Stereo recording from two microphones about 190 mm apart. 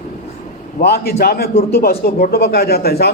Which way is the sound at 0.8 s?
55° left (ahead or behind).